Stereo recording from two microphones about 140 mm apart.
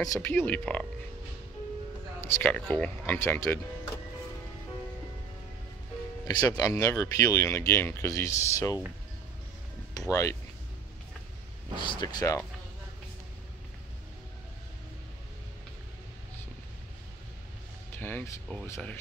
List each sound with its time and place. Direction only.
0.0 s speech: 20° left (ahead or behind)
2.2 s speech: 15° left (ahead or behind)
6.2 s speech: 25° left (ahead or behind)
9.9 s speech: 20° left (ahead or behind)
11.8 s speech: 35° left (ahead or behind)
17.9 s speech: 15° left (ahead or behind)